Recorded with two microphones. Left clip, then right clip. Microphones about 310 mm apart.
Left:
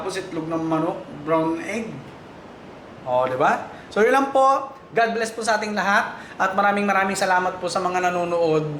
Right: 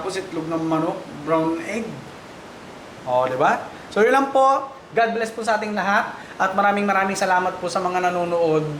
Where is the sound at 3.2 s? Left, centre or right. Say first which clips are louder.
Even; centre.